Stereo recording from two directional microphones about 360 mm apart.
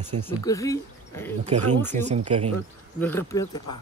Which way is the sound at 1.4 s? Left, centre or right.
Centre.